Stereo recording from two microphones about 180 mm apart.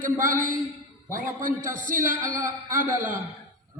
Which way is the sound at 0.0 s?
50° right (ahead or behind).